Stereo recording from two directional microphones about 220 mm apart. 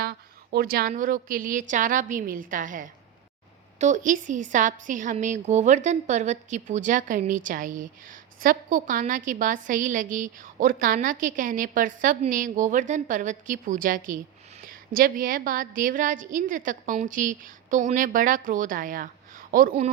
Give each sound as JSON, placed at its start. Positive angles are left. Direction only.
{"t": 0.0, "sound": "a woman's voice", "side_deg": -45}